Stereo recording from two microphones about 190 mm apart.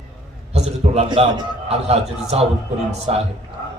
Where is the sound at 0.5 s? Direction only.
35° right (ahead or behind).